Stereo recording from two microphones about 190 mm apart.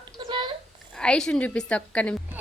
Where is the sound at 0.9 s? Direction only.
5° left (ahead or behind).